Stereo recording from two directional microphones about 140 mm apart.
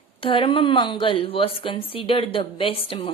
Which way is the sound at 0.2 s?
40° left (ahead or behind).